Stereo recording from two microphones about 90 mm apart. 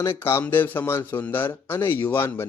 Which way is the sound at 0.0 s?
25° left (ahead or behind).